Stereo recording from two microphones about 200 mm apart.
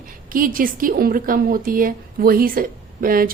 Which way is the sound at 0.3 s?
45° right (ahead or behind).